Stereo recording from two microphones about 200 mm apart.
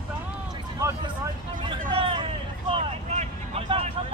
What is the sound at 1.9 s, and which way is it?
Vehicle, 25° right (ahead or behind).